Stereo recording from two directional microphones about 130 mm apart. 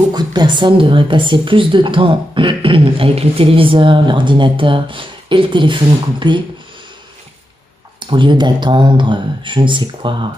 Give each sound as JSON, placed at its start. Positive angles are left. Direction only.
{"t": 0.1, "sound": "a woman's voice", "side_deg": -35}
{"t": 8.0, "sound": "a woman's voice", "side_deg": -40}